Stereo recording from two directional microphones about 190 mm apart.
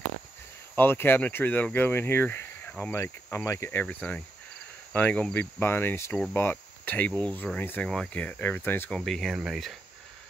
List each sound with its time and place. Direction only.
0.7 s speech: 10° left (ahead or behind)